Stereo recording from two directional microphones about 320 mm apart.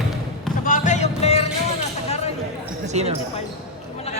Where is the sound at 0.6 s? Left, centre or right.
Left.